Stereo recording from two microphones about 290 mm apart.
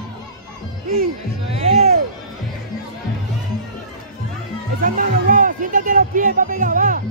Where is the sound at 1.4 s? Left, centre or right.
Centre.